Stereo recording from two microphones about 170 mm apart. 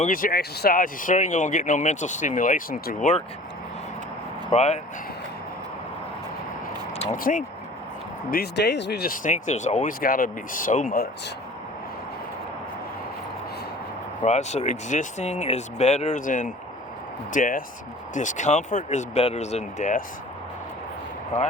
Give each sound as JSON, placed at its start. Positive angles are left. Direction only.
{"t": 0.0, "sound": "speech", "side_deg": 55}
{"t": 4.5, "sound": "speech", "side_deg": 40}
{"t": 7.0, "sound": "speech", "side_deg": 50}
{"t": 8.3, "sound": "speech", "side_deg": 75}
{"t": 14.2, "sound": "speech", "side_deg": 40}